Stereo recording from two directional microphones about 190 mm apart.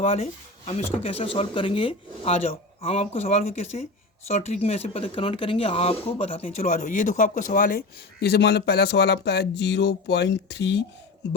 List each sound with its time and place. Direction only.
0.0 s speech: 35° left (ahead or behind)
6.6 s a man's voice: 40° left (ahead or behind); by 10.8 s 65° left (ahead or behind)